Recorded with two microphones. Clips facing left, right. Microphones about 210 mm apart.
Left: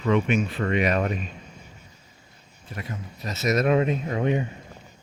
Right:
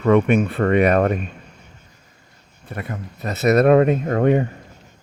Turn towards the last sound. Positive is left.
turn(degrees=-55)  # may be behind; listen again after turning